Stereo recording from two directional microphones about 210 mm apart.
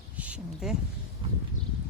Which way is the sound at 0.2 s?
5° right (ahead or behind).